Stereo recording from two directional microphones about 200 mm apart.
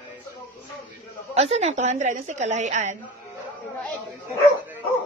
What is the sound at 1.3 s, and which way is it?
A woman's voice, 30° right (ahead or behind).